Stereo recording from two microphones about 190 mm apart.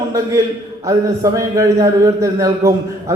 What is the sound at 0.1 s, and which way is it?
A man's voice, 15° right (ahead or behind).